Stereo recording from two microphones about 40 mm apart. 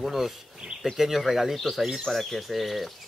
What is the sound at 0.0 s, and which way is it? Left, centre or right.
Speech, centre.